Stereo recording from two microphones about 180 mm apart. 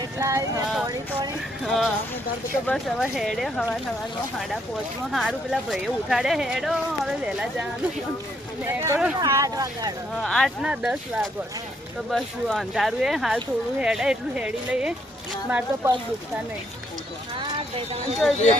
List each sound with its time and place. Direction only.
0.2 s speech: 15° right (ahead or behind)
1.6 s speech: centre (ahead or behind)
5.1 s speech: centre (ahead or behind)
8.6 s speech: 15° right (ahead or behind)
10.2 s speech: centre (ahead or behind)
18.2 s speech: centre (ahead or behind)